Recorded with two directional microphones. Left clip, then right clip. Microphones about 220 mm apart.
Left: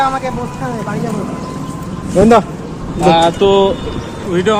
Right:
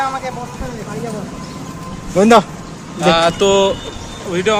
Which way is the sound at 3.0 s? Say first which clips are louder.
Left 3 dB; 55° right (ahead or behind).